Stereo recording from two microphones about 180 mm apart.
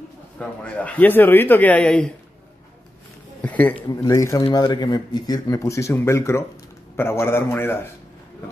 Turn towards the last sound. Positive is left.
turn(degrees=15)  # may be behind; listen again after turning